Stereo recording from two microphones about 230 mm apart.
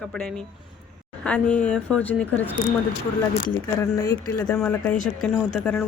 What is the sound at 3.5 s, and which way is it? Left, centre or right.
Speech, centre.